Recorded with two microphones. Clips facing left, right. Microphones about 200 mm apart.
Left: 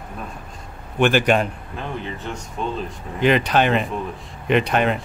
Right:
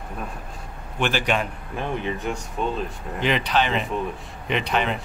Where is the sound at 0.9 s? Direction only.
55° left (ahead or behind).